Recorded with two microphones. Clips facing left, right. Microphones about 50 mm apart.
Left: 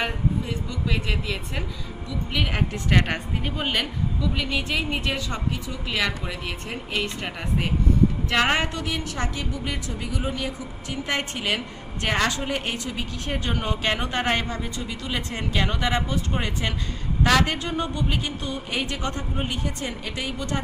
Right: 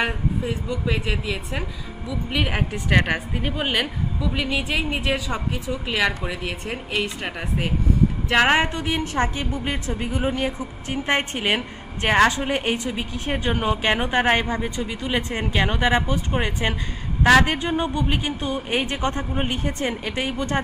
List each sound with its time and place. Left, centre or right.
0.0 s a woman's voice: centre; by 20.6 s right